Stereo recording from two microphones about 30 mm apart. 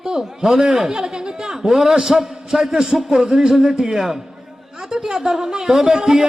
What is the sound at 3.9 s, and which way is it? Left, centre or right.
Speech, centre.